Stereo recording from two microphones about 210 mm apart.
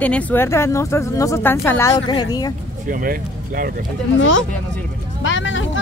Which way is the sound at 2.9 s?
40° right (ahead or behind).